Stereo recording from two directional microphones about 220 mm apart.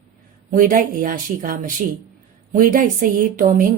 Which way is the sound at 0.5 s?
40° right (ahead or behind).